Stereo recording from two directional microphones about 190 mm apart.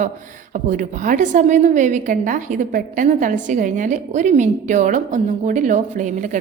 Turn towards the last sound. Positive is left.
turn(degrees=-40)  # may be behind; listen again after turning